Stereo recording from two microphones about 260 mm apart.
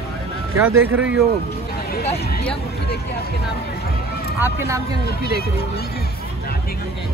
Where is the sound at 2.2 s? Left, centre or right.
Left.